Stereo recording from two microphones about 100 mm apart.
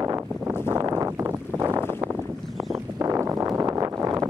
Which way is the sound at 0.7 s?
35° right (ahead or behind).